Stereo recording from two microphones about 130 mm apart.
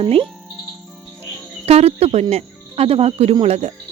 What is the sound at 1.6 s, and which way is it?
Speech, 55° right (ahead or behind).